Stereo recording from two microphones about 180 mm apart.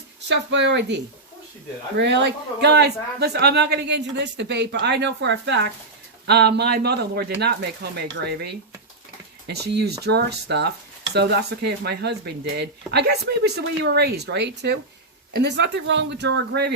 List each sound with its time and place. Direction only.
0.3 s a man's voice: 75° right (ahead or behind)